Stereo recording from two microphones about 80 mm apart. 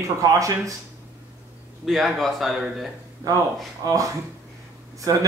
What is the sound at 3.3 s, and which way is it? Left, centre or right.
Speech, right.